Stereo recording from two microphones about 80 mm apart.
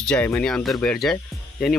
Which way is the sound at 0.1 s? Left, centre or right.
Left.